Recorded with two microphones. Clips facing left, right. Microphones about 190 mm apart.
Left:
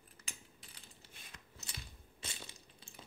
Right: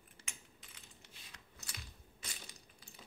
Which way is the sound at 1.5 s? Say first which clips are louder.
Left 1 dB; 25° left (ahead or behind).